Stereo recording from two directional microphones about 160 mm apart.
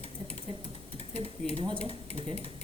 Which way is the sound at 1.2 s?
35° right (ahead or behind).